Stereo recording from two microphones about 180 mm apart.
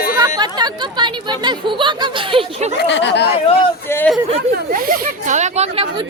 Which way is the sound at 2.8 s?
80° left.